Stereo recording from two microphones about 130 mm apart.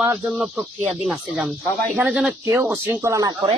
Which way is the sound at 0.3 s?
5° right (ahead or behind).